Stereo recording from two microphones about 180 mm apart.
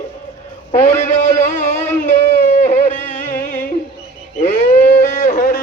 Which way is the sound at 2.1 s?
45° left (ahead or behind).